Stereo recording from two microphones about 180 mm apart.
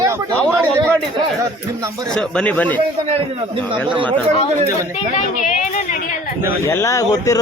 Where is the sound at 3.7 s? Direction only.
25° right (ahead or behind).